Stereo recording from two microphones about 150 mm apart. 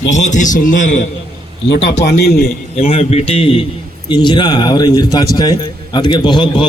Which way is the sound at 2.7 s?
45° left (ahead or behind).